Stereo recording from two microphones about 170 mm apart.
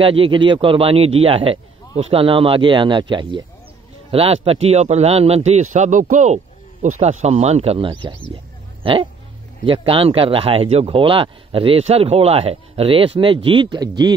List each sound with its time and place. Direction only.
0.0 s speech: 30° right (ahead or behind)
9.7 s speech: 30° right (ahead or behind)